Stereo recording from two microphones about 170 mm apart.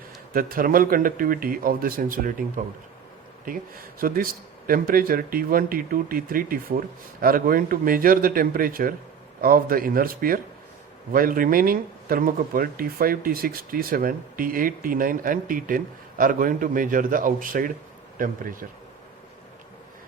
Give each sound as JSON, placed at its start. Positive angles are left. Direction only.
{"t": 0.3, "sound": "speech", "side_deg": -55}
{"t": 3.4, "sound": "a man's voice", "side_deg": -55}